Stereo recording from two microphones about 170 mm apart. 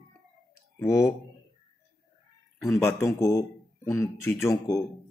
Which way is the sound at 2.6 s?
15° left (ahead or behind).